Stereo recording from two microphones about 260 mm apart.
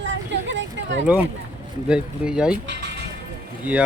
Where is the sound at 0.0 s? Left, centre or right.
Right.